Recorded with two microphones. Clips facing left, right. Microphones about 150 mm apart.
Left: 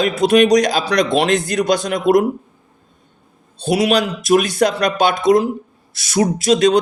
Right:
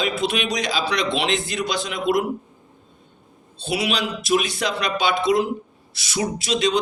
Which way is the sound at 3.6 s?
45° left (ahead or behind).